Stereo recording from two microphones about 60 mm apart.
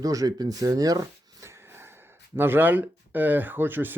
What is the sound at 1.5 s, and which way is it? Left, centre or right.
Wheeze, right.